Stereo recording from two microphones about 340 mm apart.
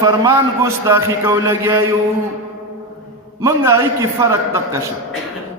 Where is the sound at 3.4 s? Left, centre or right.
Centre.